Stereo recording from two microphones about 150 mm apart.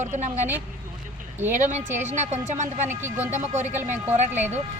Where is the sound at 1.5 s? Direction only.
55° right (ahead or behind).